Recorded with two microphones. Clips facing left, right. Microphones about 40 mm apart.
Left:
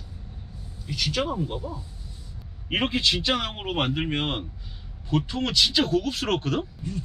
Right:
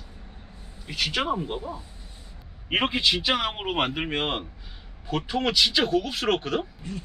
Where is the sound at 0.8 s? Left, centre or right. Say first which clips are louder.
Right 1 dB; right.